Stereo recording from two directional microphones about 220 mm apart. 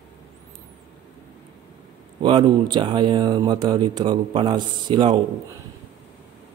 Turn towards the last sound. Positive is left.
turn(degrees=-20)  # may be behind; listen again after turning